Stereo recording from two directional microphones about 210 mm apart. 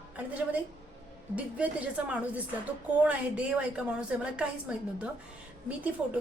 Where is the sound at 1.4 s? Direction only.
5° right (ahead or behind).